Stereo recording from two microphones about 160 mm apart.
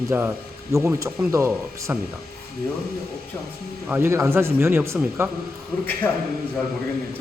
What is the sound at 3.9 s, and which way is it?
Speech, 15° right (ahead or behind).